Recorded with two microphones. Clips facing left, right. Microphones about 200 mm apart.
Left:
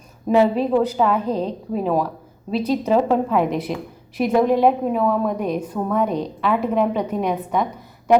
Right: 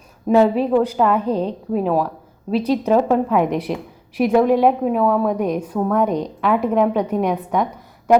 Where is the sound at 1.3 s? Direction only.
35° right (ahead or behind).